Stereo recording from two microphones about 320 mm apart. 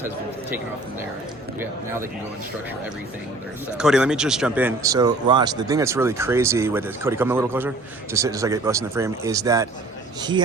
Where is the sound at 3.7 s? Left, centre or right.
Centre.